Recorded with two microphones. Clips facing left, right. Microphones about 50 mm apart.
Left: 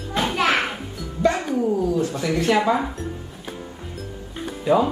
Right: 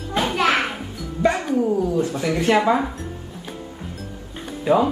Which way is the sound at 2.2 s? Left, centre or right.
Centre.